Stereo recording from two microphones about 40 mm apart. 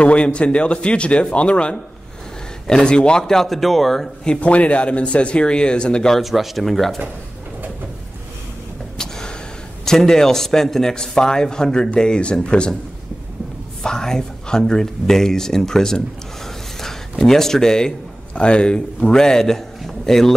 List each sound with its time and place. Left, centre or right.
0.0 s speech: left; by 4.1 s centre
4.4 s speech: left
6.2 s speech: centre
8.9 s gasp: centre
9.8 s speech: centre
13.8 s speech: centre
17.2 s speech: centre
18.3 s speech: left
19.8 s a sound: centre